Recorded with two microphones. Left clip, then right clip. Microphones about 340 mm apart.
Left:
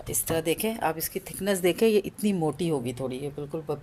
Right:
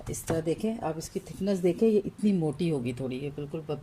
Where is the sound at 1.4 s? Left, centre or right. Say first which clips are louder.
Left 3 dB; left.